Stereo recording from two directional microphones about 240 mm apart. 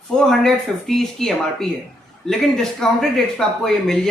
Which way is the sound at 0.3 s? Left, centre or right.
Centre.